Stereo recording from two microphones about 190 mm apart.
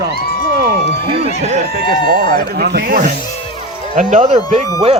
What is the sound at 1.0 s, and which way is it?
Speech, 30° right (ahead or behind).